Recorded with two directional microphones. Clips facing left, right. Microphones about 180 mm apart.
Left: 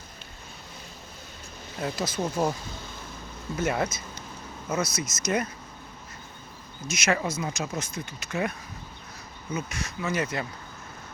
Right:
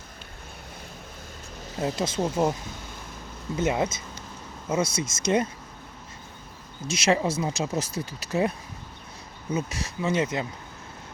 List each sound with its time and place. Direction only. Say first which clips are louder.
1.8 s speech: right 3 dB; 25° right (ahead or behind)
3.6 s speech: right 2 dB; 20° right (ahead or behind)
6.8 s speech: right 4 dB; 30° right (ahead or behind)
9.6 s speech: right 3 dB; 35° right (ahead or behind)